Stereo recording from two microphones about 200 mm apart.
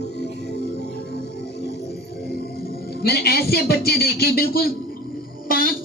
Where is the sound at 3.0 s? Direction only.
50° left (ahead or behind).